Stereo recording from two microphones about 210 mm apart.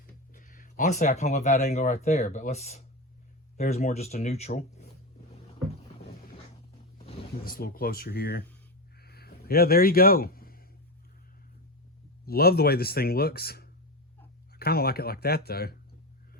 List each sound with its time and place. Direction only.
0.3 s speech: 40° left (ahead or behind)
7.4 s speech: 45° left (ahead or behind)
9.0 s a sound: 50° left (ahead or behind)
12.2 s speech: 45° left (ahead or behind)